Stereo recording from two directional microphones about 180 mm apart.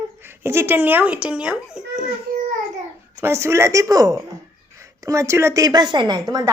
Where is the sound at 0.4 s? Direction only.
15° right (ahead or behind).